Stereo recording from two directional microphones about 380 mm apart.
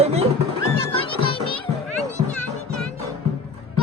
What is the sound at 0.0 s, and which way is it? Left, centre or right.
Music, centre.